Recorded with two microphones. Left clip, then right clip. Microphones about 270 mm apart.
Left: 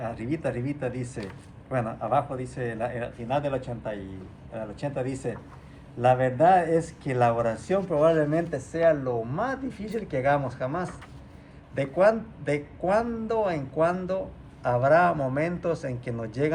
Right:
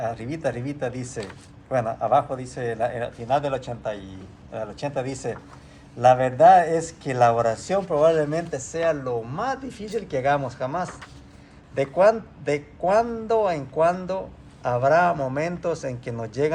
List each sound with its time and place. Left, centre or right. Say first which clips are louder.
0.0 s a man's voice: right 3 dB; right